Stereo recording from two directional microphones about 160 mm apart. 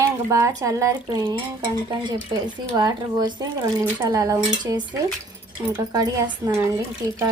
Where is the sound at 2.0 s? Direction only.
30° right (ahead or behind).